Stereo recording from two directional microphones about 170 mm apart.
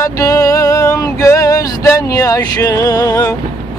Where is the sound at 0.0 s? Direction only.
20° left (ahead or behind).